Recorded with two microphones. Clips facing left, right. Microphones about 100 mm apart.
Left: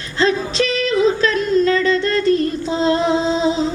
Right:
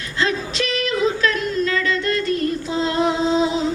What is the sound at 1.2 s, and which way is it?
Music, 30° left (ahead or behind).